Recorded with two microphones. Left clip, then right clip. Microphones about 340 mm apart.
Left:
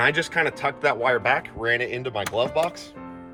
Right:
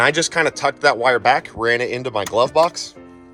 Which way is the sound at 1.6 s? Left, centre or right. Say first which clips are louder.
Right 6 dB; right.